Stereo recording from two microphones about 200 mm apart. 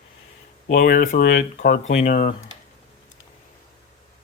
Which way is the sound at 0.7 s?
45° left (ahead or behind).